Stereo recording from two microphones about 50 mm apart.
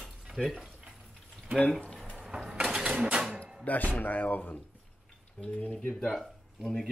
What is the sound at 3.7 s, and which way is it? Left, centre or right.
Speech, left.